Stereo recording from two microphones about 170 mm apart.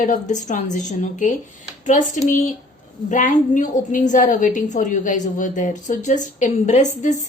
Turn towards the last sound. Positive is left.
turn(degrees=45)  # may be behind; listen again after turning